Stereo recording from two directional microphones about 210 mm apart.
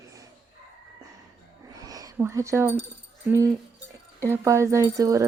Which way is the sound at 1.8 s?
15° right (ahead or behind).